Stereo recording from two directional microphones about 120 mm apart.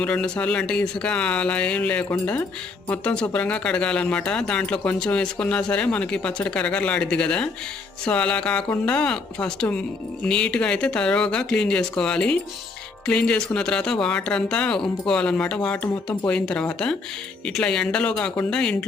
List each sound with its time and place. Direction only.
0.0 s speech: 10° left (ahead or behind)